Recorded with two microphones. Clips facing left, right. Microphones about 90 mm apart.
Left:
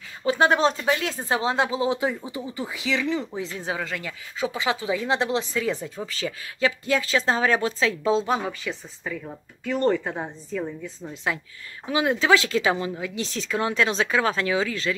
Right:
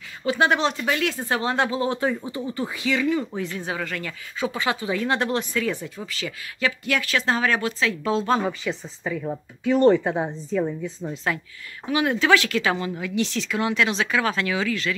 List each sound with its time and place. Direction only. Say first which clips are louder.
0.2 s speech: left 1 dB; 30° left (ahead or behind)
0.8 s speech: even; 25° left (ahead or behind)
8.5 s a woman's voice: right 4 dB; 10° right (ahead or behind)
11.9 s speech: right 1 dB; 25° left (ahead or behind)